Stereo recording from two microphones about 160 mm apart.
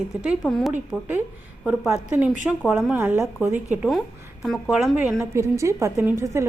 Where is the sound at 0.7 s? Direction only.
10° right (ahead or behind).